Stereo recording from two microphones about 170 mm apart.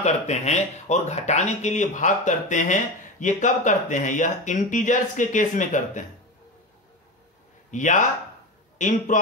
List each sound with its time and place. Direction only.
0.0 s speech: 40° left (ahead or behind)
7.7 s speech: 45° left (ahead or behind)